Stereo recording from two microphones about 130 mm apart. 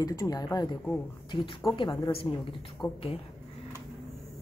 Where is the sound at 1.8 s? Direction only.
40° left (ahead or behind).